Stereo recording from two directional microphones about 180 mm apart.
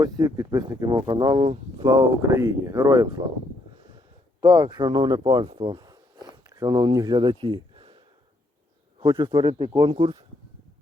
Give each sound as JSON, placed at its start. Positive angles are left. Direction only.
{"t": 0.0, "sound": "speech", "side_deg": -20}
{"t": 4.4, "sound": "speech", "side_deg": -20}
{"t": 9.0, "sound": "speech", "side_deg": -25}